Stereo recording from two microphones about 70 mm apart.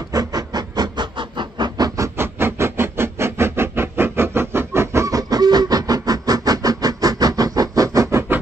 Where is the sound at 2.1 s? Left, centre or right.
Right.